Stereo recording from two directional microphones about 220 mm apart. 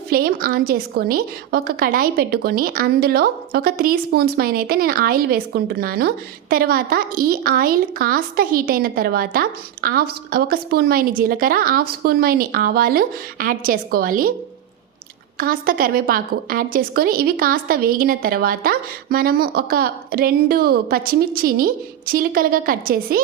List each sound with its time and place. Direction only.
0.1 s a woman's voice: 40° right (ahead or behind)
15.4 s a woman's voice: 40° right (ahead or behind)